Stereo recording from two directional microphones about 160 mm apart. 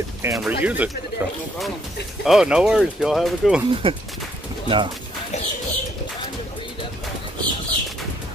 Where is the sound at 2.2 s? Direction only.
5° right (ahead or behind).